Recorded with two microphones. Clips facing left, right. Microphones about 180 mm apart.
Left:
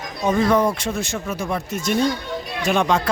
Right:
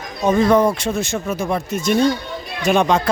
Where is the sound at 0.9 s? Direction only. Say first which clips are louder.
Right 4 dB; 25° right (ahead or behind).